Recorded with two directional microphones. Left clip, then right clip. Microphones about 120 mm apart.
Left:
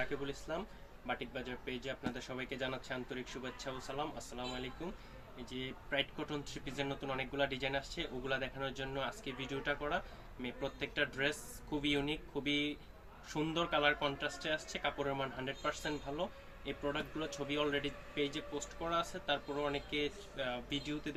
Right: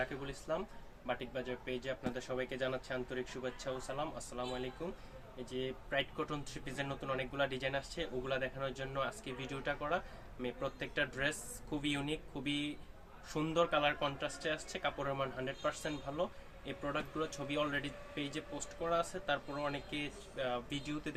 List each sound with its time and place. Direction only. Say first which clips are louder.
0.0 s speech: left 1 dB; 25° right (ahead or behind)